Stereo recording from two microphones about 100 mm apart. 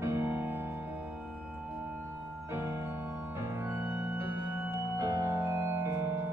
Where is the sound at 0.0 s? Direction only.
25° right (ahead or behind).